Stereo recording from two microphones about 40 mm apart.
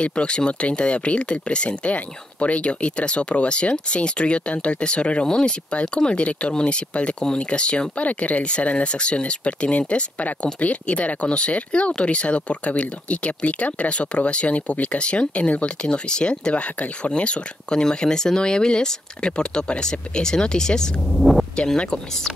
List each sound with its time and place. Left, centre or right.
0.0 s speech: left
21.1 s speech: centre
21.5 s speech: centre